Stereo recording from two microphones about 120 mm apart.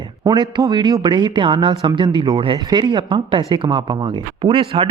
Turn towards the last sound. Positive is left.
turn(degrees=-45)  # may be behind; listen again after turning